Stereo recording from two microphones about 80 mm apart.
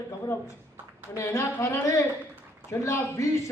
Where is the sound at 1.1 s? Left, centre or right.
Left.